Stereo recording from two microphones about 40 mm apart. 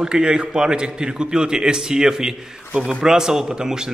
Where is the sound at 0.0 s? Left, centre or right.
Right.